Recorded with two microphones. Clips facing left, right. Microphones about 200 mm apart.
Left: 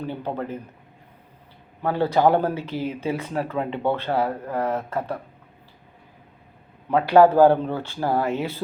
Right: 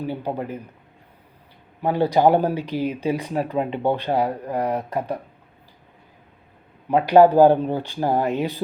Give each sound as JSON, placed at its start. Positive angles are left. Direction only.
{"t": 0.1, "sound": "speech", "side_deg": -10}
{"t": 1.8, "sound": "speech", "side_deg": -15}
{"t": 6.9, "sound": "speech", "side_deg": -15}